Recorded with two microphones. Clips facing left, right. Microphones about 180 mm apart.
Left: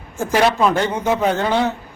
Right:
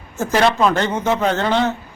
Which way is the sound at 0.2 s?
10° left (ahead or behind).